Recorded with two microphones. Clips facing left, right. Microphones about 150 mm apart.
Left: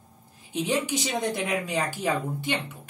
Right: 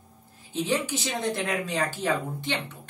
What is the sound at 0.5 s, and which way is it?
Speech, 15° left (ahead or behind).